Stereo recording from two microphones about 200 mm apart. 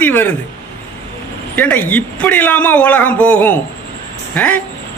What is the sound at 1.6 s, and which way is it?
A man's voice, 10° left (ahead or behind).